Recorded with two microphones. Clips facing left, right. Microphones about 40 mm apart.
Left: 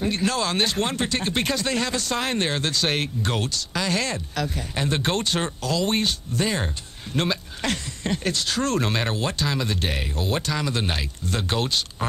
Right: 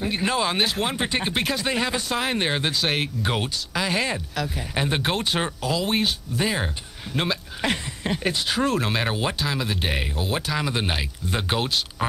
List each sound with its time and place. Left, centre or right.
0.2 s speech: centre